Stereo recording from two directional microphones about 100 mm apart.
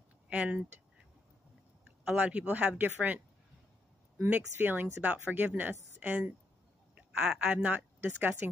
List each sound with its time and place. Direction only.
0.3 s speech: 15° right (ahead or behind)
2.0 s speech: 15° right (ahead or behind)
4.2 s speech: 20° right (ahead or behind)